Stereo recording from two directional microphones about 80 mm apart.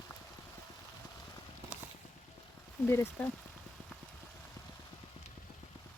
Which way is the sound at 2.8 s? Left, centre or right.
Left.